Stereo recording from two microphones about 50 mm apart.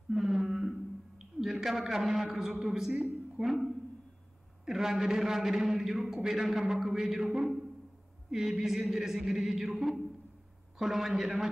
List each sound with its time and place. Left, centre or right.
0.1 s a sound: centre
4.6 s a man's voice: centre
8.3 s a man's voice: centre